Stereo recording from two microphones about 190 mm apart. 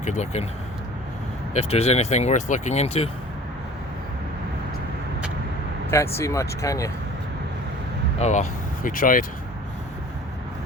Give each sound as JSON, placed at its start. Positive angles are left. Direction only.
{"t": 0.0, "sound": "speech", "side_deg": 40}
{"t": 1.5, "sound": "speech", "side_deg": 35}
{"t": 5.9, "sound": "speech", "side_deg": 15}
{"t": 8.2, "sound": "speech", "side_deg": 40}